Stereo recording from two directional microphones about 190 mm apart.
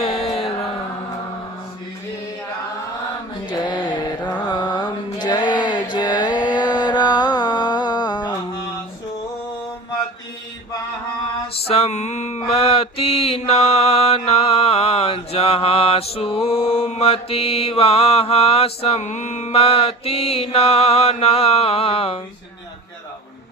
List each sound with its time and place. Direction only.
0.0 s mantra: 30° left (ahead or behind)
4.4 s a sound: 20° left (ahead or behind)
11.7 s mantra: 35° left (ahead or behind)